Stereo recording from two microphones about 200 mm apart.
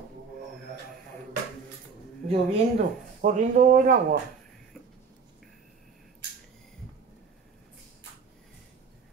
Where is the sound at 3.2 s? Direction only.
40° right (ahead or behind).